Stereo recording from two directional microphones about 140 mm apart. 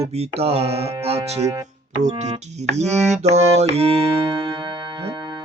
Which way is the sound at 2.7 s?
50° right (ahead or behind).